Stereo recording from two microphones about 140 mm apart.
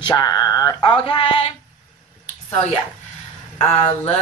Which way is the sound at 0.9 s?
40° left (ahead or behind).